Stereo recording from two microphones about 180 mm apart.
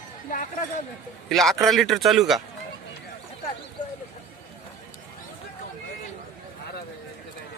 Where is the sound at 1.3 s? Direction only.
Centre (ahead or behind).